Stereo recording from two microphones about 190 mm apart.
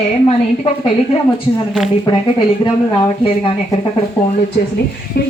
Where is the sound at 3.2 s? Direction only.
30° left (ahead or behind).